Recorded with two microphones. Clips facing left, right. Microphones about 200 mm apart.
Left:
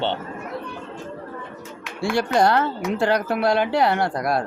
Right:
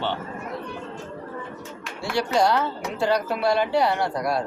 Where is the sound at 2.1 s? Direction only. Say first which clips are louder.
Left 2 dB; 55° left (ahead or behind).